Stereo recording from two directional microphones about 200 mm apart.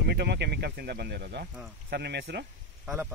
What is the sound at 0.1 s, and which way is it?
Speech, 55° right (ahead or behind).